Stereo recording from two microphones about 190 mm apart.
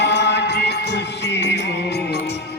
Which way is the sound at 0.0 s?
65° left (ahead or behind).